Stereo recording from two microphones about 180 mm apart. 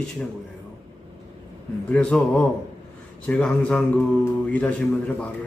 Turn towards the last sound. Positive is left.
turn(degrees=10)  # may be behind; listen again after turning